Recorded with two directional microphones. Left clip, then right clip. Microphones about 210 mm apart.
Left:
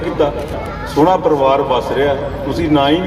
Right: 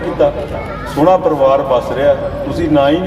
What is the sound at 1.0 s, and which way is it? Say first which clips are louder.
A man's voice: right 2 dB; 20° left (ahead or behind).